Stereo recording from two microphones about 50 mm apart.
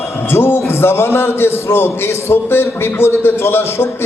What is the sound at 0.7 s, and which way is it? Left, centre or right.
A man's voice, left.